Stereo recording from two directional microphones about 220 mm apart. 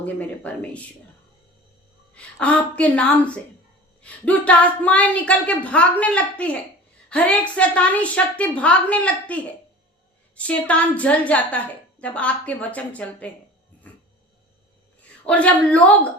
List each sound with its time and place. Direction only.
0.0 s speech: 5° left (ahead or behind)
2.1 s a woman's voice: 5° left (ahead or behind)
15.3 s speech: 5° left (ahead or behind)